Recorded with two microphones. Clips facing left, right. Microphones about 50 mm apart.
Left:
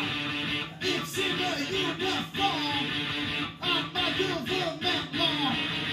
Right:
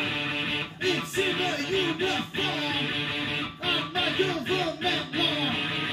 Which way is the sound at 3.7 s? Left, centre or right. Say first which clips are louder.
Right 2 dB; centre.